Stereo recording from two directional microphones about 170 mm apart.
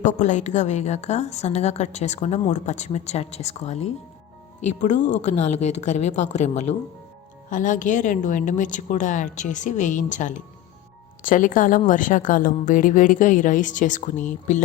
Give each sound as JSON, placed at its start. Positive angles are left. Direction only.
{"t": 0.0, "sound": "a woman's voice", "side_deg": 45}